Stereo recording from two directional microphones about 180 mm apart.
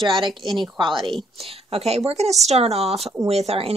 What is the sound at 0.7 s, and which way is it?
Speech, 25° right (ahead or behind).